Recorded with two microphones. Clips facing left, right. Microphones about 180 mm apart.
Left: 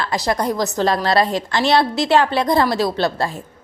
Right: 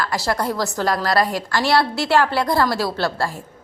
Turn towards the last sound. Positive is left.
turn(degrees=20)  # may be behind; listen again after turning